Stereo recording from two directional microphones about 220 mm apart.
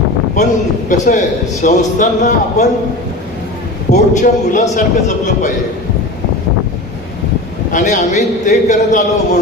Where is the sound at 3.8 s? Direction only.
35° left (ahead or behind).